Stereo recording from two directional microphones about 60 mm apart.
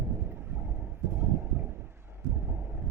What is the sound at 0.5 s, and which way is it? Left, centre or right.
Vehicle, right.